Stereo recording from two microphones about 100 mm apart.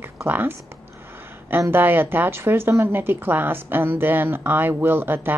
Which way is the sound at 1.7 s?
20° right (ahead or behind).